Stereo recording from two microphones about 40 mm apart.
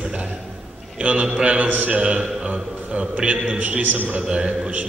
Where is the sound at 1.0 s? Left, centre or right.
Right.